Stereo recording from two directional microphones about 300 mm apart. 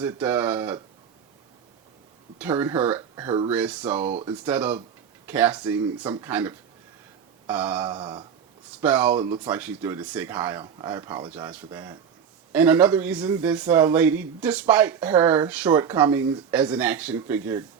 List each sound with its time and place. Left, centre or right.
0.0 s speech: centre
2.4 s speech: centre
3.5 s a man's voice: centre
4.1 s speech: centre
4.4 s a man's voice: centre
7.4 s a sound: centre
7.9 s speech: centre
8.7 s a man's voice: centre